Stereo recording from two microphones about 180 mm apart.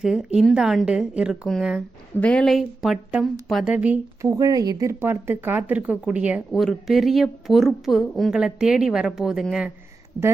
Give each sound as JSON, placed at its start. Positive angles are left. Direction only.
{"t": 0.0, "sound": "a woman's voice", "side_deg": -5}